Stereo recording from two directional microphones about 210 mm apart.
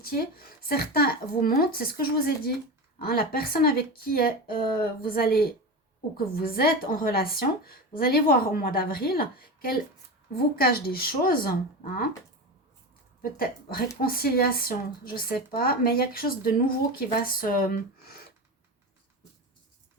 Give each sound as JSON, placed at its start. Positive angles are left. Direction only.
{"t": 0.0, "sound": "speech", "side_deg": 45}
{"t": 13.3, "sound": "speech", "side_deg": 45}